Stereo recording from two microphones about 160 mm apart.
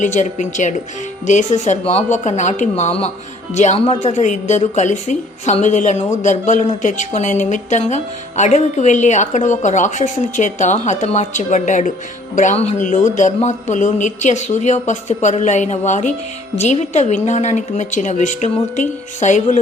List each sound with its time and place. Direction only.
0.0 s speech: 50° left (ahead or behind)